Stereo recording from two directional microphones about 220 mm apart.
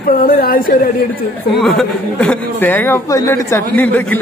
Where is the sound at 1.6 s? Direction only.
Centre (ahead or behind).